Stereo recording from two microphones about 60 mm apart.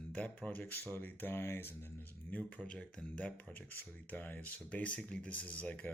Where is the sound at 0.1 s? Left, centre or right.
Left.